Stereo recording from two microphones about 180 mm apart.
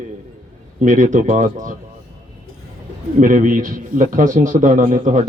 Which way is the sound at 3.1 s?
45° right (ahead or behind).